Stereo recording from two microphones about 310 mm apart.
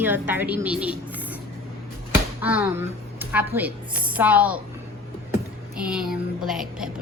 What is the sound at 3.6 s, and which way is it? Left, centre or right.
A woman's voice, centre.